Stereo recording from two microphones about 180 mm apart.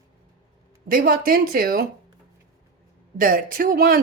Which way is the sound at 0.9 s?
50° right (ahead or behind).